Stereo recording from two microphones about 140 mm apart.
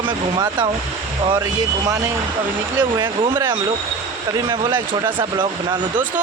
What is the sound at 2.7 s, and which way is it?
Speech, 35° right (ahead or behind).